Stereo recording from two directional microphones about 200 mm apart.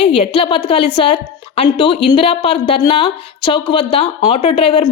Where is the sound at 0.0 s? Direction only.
25° left (ahead or behind).